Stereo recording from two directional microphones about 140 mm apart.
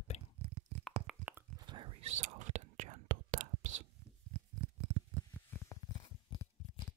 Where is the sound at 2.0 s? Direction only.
55° right (ahead or behind).